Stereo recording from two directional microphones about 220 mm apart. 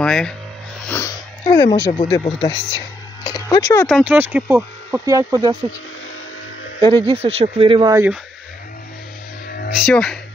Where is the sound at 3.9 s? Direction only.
5° right (ahead or behind).